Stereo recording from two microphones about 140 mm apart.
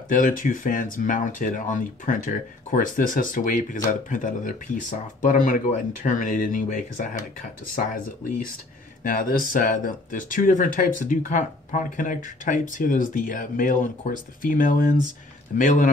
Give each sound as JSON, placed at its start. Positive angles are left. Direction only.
{"t": 0.1, "sound": "speech", "side_deg": 75}
{"t": 9.0, "sound": "speech", "side_deg": 85}